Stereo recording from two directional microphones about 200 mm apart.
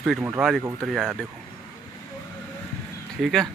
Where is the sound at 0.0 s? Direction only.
5° right (ahead or behind).